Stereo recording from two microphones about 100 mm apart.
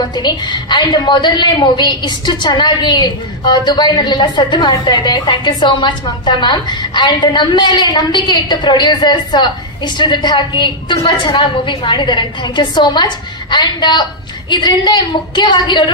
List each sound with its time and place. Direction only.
0.0 s a woman's voice: 45° left (ahead or behind)